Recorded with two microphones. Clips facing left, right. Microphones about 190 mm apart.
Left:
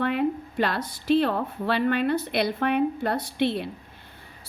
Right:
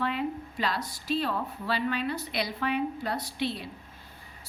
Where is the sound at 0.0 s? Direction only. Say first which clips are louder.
Left 6 dB; 55° left (ahead or behind).